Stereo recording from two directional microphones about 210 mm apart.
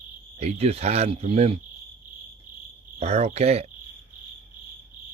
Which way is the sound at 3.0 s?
30° right (ahead or behind).